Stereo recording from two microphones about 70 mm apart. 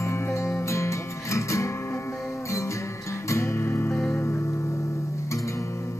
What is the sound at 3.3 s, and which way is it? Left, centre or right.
Music, left.